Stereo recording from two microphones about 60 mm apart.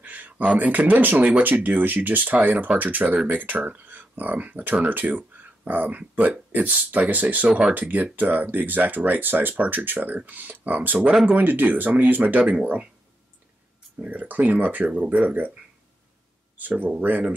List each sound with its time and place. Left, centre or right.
0.0 s a sound: right
0.6 s speech: right
14.0 s speech: right
17.0 s speech: right